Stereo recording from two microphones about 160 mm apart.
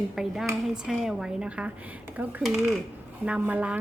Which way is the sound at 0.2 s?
Centre (ahead or behind).